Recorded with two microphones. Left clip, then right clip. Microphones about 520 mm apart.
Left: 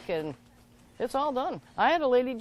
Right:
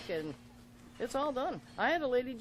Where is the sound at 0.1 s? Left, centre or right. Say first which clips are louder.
Left 6 dB; left.